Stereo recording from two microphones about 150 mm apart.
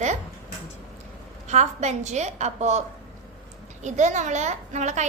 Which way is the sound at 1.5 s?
50° right (ahead or behind).